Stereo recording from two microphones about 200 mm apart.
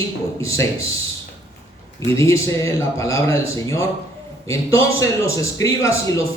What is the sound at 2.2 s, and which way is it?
A man's voice, 15° left (ahead or behind).